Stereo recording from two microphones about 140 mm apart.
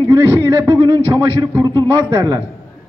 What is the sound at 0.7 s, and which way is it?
A man's voice, 30° right (ahead or behind).